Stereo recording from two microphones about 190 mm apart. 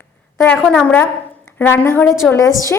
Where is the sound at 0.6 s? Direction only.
5° left (ahead or behind).